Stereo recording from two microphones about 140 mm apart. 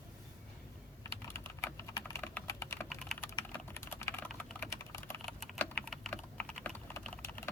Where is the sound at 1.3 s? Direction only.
20° left (ahead or behind).